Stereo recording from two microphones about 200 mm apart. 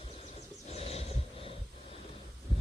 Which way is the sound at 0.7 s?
30° left (ahead or behind).